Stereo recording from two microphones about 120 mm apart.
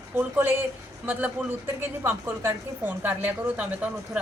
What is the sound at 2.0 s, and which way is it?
A woman's voice, 20° right (ahead or behind).